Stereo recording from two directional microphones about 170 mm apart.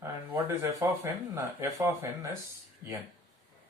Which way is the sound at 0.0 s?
15° right (ahead or behind).